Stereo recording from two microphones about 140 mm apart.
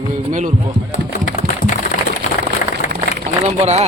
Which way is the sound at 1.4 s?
75° left (ahead or behind).